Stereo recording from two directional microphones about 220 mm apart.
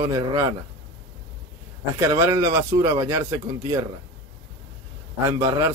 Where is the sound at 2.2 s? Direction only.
15° right (ahead or behind).